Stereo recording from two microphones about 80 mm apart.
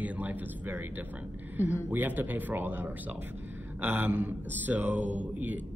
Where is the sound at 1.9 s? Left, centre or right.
Right.